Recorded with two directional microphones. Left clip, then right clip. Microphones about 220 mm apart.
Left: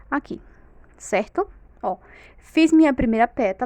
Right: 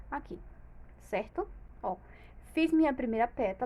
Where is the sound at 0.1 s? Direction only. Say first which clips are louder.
Left 13 dB; 50° left (ahead or behind).